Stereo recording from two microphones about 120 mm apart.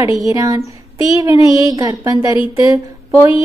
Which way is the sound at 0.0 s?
30° right (ahead or behind).